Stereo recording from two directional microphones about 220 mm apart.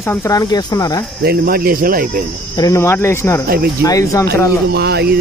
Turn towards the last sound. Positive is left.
turn(degrees=-50)  # may be behind; listen again after turning